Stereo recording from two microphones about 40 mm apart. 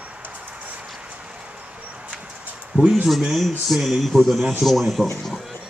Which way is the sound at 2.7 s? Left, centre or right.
Right.